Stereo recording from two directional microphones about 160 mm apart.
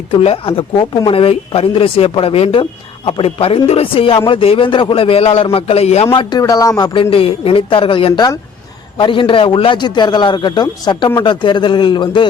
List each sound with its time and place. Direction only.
0.1 s speech: 35° left (ahead or behind)
6.1 s a man's voice: 25° left (ahead or behind)